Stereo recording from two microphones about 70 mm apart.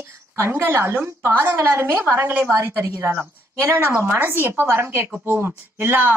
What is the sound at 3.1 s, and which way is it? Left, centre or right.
Speech, right.